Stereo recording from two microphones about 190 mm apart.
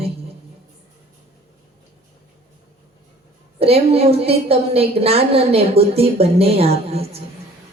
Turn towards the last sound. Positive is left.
turn(degrees=-30)  # may be behind; listen again after turning